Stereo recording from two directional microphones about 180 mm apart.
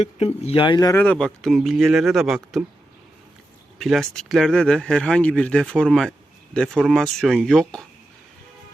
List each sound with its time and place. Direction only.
0.0 s speech: 35° left (ahead or behind)
0.9 s speech: 5° left (ahead or behind)
3.8 s speech: centre (ahead or behind)